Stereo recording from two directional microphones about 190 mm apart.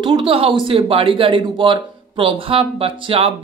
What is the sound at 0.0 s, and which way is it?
Speech, 25° right (ahead or behind).